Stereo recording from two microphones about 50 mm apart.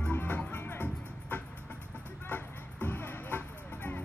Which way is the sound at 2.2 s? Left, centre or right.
Left.